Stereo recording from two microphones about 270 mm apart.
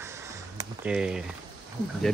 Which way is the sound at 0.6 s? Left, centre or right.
Centre.